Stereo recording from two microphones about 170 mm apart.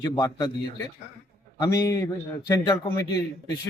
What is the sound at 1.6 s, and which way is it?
A man's voice, 20° left (ahead or behind).